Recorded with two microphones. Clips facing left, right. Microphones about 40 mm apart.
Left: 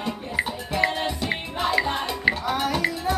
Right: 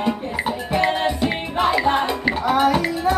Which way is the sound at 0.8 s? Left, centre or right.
Centre.